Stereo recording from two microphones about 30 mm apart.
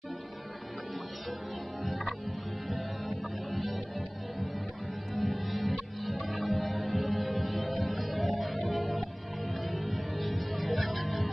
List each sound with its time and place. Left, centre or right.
2.7 s music: centre
5.1 s music: centre